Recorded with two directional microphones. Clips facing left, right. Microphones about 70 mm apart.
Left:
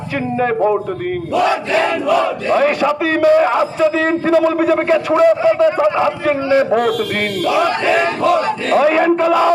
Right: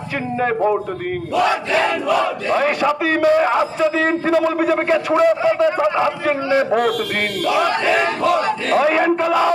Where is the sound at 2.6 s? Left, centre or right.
Centre.